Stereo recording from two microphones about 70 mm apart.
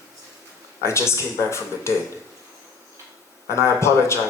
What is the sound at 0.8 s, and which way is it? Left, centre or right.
Speech, left.